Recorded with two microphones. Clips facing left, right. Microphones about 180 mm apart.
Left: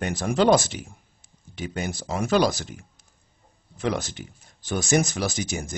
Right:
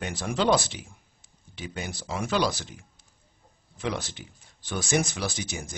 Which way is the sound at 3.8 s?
45° left (ahead or behind).